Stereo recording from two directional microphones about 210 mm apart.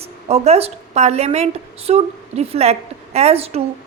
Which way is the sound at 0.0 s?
30° right (ahead or behind).